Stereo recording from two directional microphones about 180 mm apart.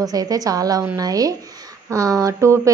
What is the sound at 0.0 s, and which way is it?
A woman's voice, 20° right (ahead or behind).